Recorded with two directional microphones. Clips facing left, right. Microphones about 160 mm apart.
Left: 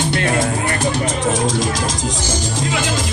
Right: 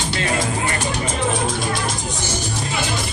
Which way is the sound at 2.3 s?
90° left.